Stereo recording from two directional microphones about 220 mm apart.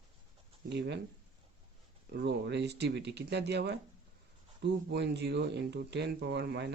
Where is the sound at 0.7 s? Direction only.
50° right (ahead or behind).